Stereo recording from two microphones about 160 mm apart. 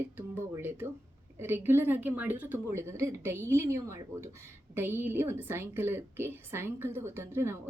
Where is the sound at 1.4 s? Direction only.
15° right (ahead or behind).